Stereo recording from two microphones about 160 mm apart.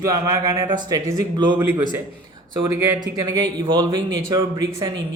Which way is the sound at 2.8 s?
20° right (ahead or behind).